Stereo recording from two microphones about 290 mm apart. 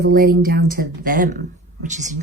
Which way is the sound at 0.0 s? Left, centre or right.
Right.